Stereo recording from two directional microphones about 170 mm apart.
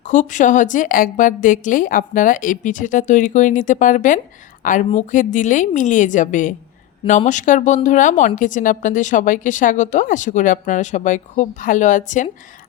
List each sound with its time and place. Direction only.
0.0 s a woman's voice: 45° left (ahead or behind)